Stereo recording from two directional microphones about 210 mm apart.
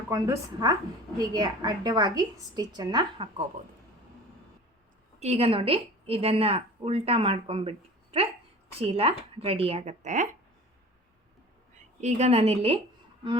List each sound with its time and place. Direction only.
0.1 s a woman's voice: 15° right (ahead or behind)
5.2 s a woman's voice: 30° right (ahead or behind)
11.8 s a woman's voice: 35° right (ahead or behind)